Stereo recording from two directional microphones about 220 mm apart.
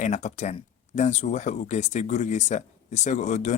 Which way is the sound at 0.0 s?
30° left (ahead or behind).